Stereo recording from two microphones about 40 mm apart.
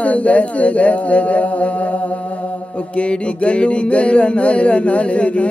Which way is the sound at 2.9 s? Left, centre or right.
Left.